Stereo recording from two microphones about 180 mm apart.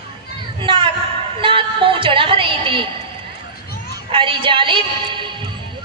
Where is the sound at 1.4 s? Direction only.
30° right (ahead or behind).